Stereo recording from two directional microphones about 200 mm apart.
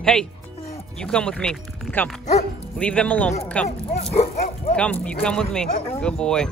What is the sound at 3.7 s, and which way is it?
Speech, 30° left (ahead or behind).